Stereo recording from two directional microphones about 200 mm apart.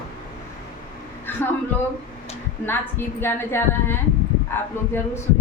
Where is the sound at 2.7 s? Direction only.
10° left (ahead or behind).